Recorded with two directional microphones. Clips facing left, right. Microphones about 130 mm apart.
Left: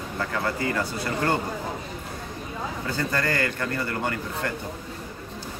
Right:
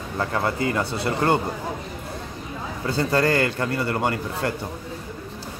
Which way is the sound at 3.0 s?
30° right (ahead or behind).